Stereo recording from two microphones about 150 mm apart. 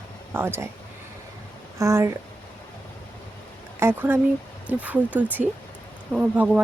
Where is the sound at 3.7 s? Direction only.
15° right (ahead or behind).